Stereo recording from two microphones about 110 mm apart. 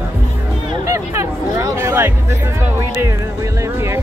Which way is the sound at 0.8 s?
25° right (ahead or behind).